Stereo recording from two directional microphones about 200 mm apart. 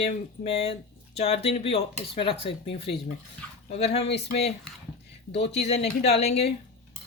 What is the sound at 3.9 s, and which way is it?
Speech, 30° left (ahead or behind).